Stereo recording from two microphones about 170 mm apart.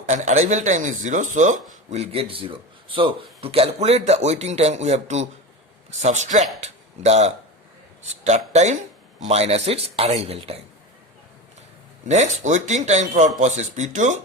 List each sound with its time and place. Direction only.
0.0 s speech: 45° right (ahead or behind)
12.0 s speech: 45° right (ahead or behind)